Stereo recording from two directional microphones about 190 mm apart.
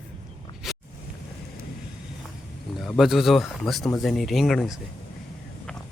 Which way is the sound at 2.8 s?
Centre (ahead or behind).